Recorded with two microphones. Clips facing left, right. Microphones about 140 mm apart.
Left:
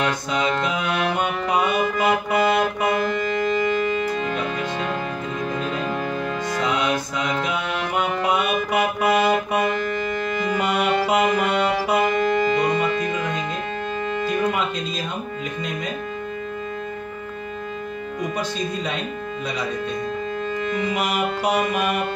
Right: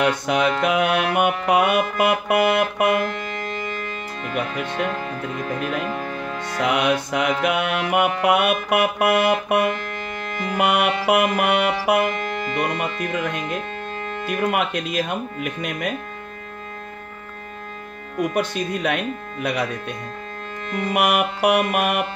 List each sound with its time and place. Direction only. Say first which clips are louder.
0.0 s music: right 3 dB; 65° right (ahead or behind)
3.1 s music: left 7 dB; centre (ahead or behind)
5.6 s music: even; 5° right (ahead or behind)
6.6 s music: right 4 dB; 65° right (ahead or behind)
9.8 s music: left 6 dB; centre (ahead or behind)
10.6 s music: right 3 dB; 65° right (ahead or behind)
12.1 s music: left 7 dB; centre (ahead or behind)
12.6 s music: left 4 dB; 65° right (ahead or behind)
18.2 s music: right 4 dB; 65° right (ahead or behind)
20.7 s music: right 6 dB; 65° right (ahead or behind)